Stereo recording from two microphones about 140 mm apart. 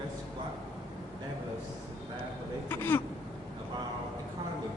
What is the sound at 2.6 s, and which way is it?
Speech, 15° left (ahead or behind).